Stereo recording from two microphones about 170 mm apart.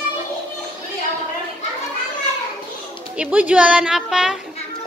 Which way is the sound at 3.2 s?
5° right (ahead or behind).